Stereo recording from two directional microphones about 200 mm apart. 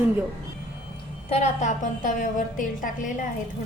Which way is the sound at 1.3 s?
35° left (ahead or behind).